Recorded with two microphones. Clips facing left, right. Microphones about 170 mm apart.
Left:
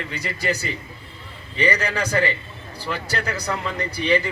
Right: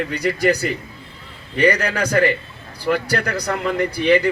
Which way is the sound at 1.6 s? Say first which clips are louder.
Right 5 dB; 50° right (ahead or behind).